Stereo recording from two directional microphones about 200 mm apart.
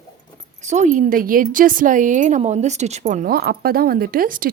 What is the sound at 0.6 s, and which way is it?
A woman's voice, 35° right (ahead or behind).